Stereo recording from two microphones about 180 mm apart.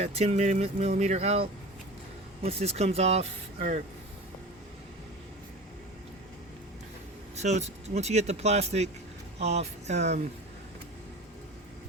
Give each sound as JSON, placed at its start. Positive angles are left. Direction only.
{"t": 0.0, "sound": "speech", "side_deg": -35}
{"t": 7.3, "sound": "speech", "side_deg": -40}